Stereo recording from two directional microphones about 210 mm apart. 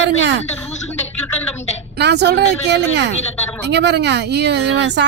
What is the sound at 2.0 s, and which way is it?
Speech, 55° right (ahead or behind).